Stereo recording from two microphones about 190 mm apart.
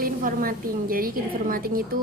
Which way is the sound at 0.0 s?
50° right (ahead or behind).